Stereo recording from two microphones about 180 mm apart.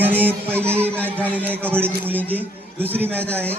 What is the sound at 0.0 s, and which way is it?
A man's voice, 10° right (ahead or behind).